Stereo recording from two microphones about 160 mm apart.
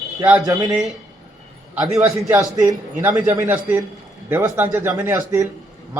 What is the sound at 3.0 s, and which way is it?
A man's voice, 10° right (ahead or behind).